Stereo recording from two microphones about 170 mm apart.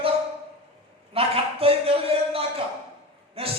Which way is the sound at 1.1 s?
35° right (ahead or behind).